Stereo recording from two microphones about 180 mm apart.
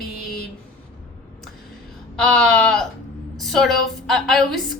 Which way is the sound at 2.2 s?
5° left (ahead or behind).